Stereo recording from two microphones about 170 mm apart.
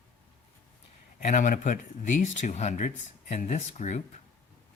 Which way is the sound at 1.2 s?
45° left (ahead or behind).